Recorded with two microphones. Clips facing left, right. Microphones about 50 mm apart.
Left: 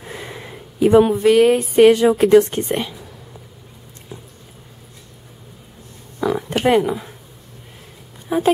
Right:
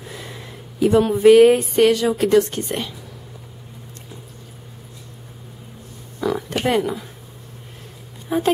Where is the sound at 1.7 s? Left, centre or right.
Centre.